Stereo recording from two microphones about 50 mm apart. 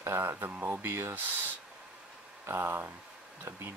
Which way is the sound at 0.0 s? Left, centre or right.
Right.